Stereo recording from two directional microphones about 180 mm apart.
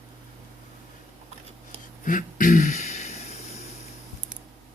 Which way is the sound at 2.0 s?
45° left (ahead or behind).